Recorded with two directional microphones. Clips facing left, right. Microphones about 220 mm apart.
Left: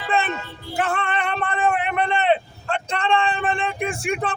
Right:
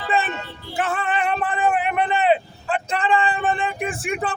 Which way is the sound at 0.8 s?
Centre (ahead or behind).